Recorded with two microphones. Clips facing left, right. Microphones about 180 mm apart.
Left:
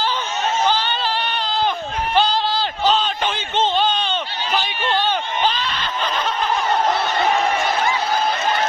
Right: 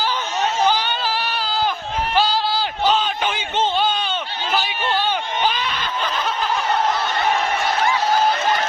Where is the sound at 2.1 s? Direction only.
5° right (ahead or behind).